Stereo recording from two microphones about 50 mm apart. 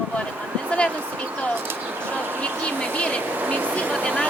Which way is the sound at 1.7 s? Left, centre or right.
Right.